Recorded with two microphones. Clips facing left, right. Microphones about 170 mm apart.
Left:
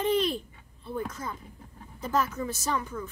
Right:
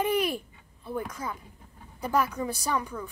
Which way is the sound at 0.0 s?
10° right (ahead or behind).